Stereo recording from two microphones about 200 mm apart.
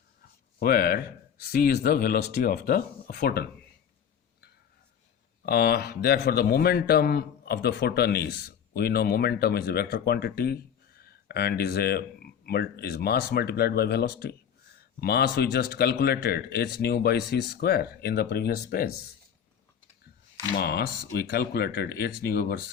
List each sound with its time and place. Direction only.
0.6 s a man's voice: 50° left (ahead or behind)
5.5 s a man's voice: 50° left (ahead or behind)
20.6 s a man's voice: 50° left (ahead or behind)